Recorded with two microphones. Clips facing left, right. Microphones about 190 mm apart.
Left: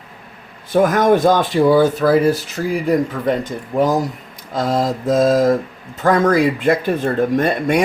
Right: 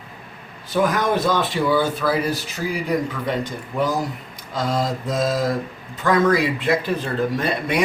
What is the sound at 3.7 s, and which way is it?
Speech, 40° left (ahead or behind).